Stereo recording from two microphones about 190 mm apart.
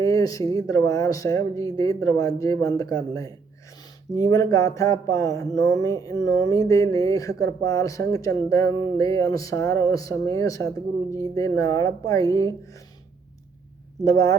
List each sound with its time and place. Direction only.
0.0 s speech: 20° left (ahead or behind)
14.0 s speech: 15° left (ahead or behind)